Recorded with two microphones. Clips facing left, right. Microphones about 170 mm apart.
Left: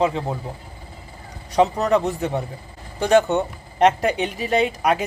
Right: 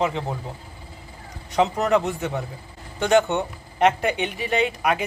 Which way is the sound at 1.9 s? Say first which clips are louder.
Left 2 dB; 35° left (ahead or behind).